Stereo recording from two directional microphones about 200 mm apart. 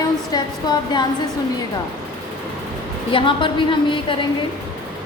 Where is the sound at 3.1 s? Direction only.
25° left (ahead or behind).